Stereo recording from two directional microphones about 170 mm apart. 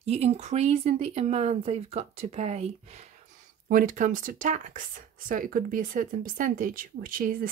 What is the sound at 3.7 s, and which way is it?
Speech, 50° right (ahead or behind).